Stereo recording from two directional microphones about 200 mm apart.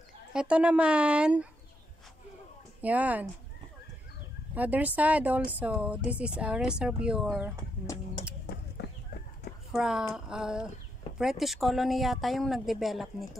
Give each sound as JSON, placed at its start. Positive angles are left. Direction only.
{"t": 0.3, "sound": "speech", "side_deg": -5}
{"t": 2.8, "sound": "speech", "side_deg": -5}
{"t": 4.6, "sound": "speech", "side_deg": -10}
{"t": 7.8, "sound": "a sound", "side_deg": 15}
{"t": 8.5, "sound": "a sound", "side_deg": 45}
{"t": 9.7, "sound": "speech", "side_deg": 0}